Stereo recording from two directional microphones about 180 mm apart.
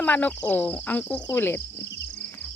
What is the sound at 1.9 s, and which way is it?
Cricket, 75° left (ahead or behind).